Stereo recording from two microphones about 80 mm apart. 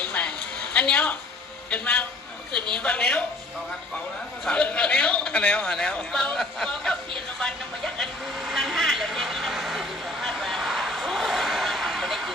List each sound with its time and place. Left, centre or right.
0.2 s a sound: centre
0.7 s a woman's voice: centre
4.4 s a man's voice: centre
7.3 s vehicle: centre